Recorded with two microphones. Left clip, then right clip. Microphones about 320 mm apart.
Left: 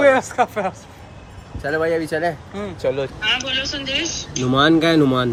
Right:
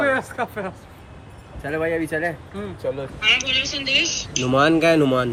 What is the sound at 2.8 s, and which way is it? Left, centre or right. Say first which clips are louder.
Speech: left 6 dB; left.